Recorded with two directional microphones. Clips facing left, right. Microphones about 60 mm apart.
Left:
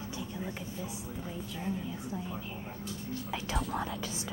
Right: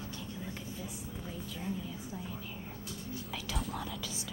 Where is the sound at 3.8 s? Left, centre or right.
Left.